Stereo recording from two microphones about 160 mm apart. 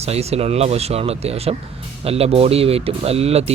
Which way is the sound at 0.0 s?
40° right (ahead or behind).